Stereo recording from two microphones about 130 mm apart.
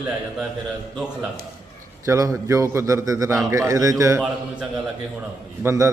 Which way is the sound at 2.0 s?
25° right (ahead or behind).